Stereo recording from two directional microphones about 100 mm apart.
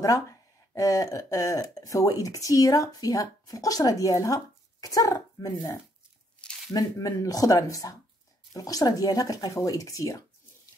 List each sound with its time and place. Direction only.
0.0 s speech: 35° left (ahead or behind)